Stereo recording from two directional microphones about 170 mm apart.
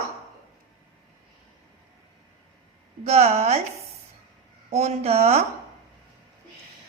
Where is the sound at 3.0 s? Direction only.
40° right (ahead or behind).